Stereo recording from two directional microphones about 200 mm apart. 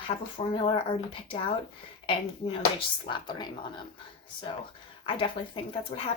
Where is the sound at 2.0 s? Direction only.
25° left (ahead or behind).